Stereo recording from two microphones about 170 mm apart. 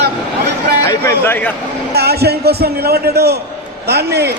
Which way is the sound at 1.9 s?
70° right (ahead or behind).